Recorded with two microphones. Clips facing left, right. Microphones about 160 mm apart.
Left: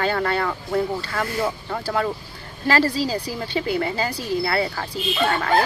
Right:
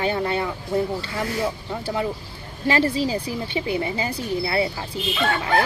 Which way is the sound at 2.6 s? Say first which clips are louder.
Even; 20° right (ahead or behind).